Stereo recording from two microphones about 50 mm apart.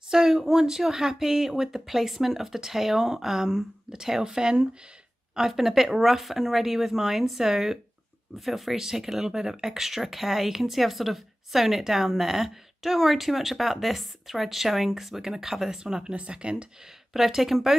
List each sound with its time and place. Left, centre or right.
0.1 s speech: centre
17.1 s speech: centre